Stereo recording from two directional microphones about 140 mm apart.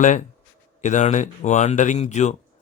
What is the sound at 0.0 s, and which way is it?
Speech, 60° left (ahead or behind).